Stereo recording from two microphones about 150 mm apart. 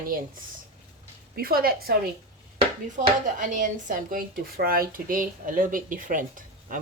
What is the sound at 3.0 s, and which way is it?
Speech, 55° right (ahead or behind).